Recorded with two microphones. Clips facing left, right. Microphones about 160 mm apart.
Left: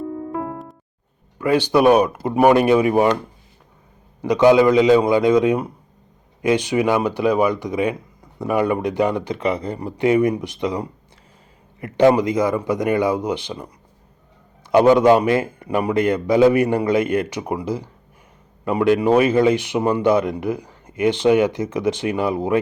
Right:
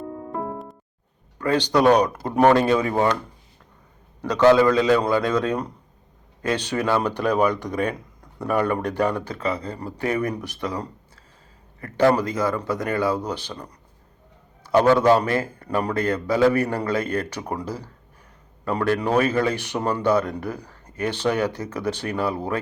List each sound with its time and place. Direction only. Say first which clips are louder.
0.3 s music: left 2 dB; centre (ahead or behind)
1.4 s speech: left 3 dB; 10° left (ahead or behind)
4.2 s speech: left 3 dB; 15° left (ahead or behind)
14.7 s speech: left 4 dB; 15° left (ahead or behind)